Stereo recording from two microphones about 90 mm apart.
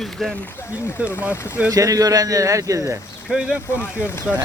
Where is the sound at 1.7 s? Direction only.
40° right (ahead or behind).